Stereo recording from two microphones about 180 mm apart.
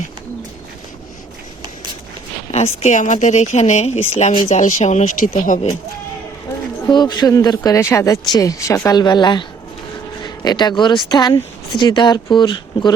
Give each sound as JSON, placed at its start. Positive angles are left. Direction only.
{"t": 2.5, "sound": "a sound", "side_deg": 35}
{"t": 2.8, "sound": "speech", "side_deg": 40}
{"t": 6.9, "sound": "speech", "side_deg": 25}